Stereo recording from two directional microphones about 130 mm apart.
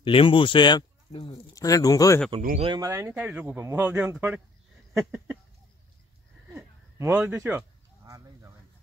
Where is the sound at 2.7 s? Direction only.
20° right (ahead or behind).